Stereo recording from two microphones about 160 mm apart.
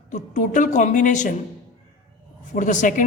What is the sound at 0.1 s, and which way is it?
A woman's voice, 50° left (ahead or behind).